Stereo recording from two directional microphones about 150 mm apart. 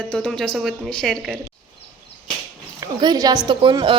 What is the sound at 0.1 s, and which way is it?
A woman's voice, 5° left (ahead or behind).